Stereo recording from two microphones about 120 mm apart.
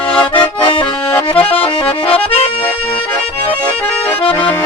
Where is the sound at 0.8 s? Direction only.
15° left (ahead or behind).